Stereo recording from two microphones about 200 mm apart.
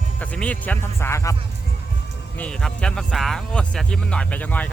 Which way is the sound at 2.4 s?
5° left (ahead or behind).